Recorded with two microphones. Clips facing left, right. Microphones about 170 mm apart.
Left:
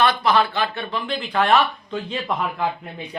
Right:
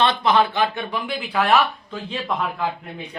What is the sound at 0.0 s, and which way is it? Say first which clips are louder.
Speech: even; 20° right (ahead or behind).